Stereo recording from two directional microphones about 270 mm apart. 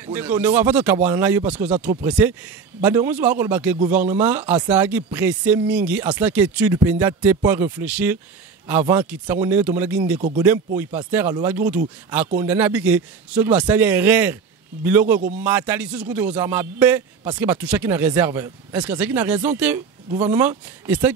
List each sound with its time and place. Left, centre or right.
0.0 s a man's voice: centre
15.1 s a man's voice: right
15.4 s a man's voice: centre